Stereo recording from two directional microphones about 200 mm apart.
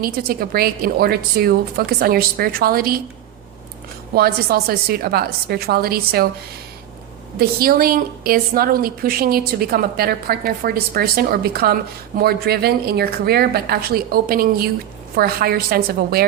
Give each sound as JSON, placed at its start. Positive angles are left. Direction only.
{"t": 0.0, "sound": "a woman's voice", "side_deg": -50}
{"t": 4.1, "sound": "a woman's voice", "side_deg": -50}
{"t": 7.3, "sound": "a woman's voice", "side_deg": -45}